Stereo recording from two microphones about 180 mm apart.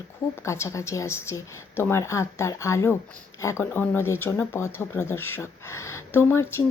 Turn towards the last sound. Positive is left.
turn(degrees=15)  # may be behind; listen again after turning